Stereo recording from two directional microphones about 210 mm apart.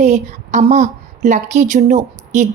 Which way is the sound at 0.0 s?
35° right (ahead or behind).